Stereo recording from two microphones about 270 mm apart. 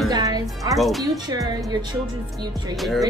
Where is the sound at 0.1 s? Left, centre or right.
Centre.